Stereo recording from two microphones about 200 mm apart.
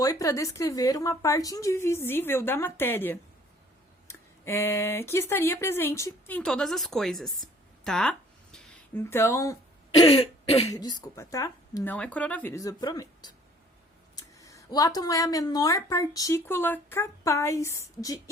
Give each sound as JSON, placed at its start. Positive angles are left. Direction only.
{"t": 0.0, "sound": "speech", "side_deg": 15}
{"t": 10.0, "sound": "throat clearing", "side_deg": 30}
{"t": 10.7, "sound": "speech", "side_deg": 20}